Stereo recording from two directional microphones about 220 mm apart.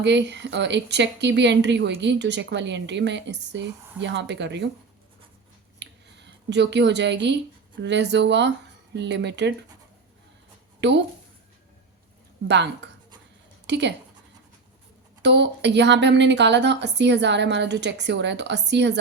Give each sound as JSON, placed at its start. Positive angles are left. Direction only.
{"t": 0.0, "sound": "speech", "side_deg": -50}
{"t": 5.8, "sound": "a sound", "side_deg": -50}
{"t": 7.8, "sound": "speech", "side_deg": -50}
{"t": 10.8, "sound": "a sound", "side_deg": -50}
{"t": 12.5, "sound": "speech", "side_deg": -50}
{"t": 15.2, "sound": "speech", "side_deg": -50}